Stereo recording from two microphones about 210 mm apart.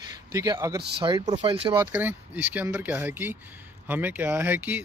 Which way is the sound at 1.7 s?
10° right (ahead or behind).